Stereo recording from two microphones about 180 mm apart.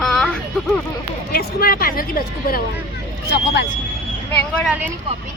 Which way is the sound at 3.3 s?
70° left (ahead or behind).